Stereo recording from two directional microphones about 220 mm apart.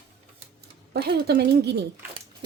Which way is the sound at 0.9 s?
50° right (ahead or behind).